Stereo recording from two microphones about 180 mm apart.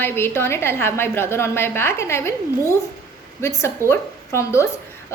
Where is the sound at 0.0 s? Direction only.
15° left (ahead or behind).